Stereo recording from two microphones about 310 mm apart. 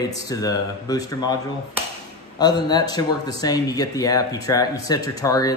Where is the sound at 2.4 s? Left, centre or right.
Centre.